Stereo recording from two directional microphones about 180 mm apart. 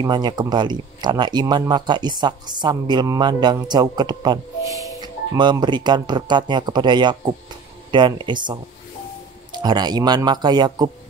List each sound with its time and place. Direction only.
0.0 s speech: 25° right (ahead or behind)